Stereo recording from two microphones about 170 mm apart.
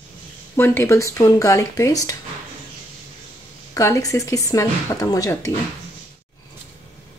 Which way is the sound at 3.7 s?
15° left (ahead or behind).